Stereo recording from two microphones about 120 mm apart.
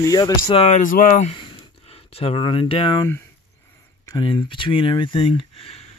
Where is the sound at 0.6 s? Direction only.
90° left.